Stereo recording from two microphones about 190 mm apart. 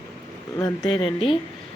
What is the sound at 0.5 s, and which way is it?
Speech, 20° left (ahead or behind).